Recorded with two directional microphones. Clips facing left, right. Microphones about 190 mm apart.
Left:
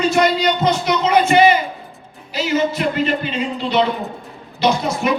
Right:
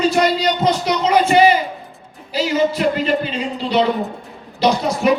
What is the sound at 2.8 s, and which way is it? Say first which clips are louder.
Speech: right 2 dB; 35° right (ahead or behind).